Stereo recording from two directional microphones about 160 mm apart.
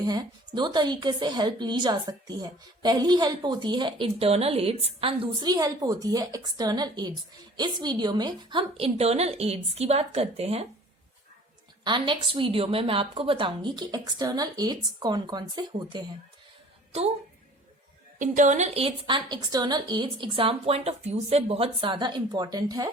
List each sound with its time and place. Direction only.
0.0 s a woman's voice: 25° right (ahead or behind)
11.9 s a woman's voice: 30° right (ahead or behind)
18.2 s a woman's voice: 50° right (ahead or behind); by 22.9 s 25° right (ahead or behind)